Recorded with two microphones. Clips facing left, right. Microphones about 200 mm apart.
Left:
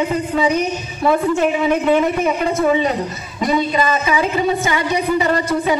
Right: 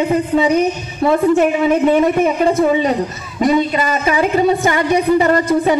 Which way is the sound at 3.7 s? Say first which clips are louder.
Right 1 dB; 45° right (ahead or behind).